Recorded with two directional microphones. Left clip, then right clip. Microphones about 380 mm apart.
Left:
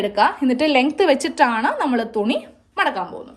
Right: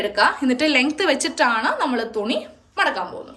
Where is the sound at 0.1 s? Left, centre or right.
Centre.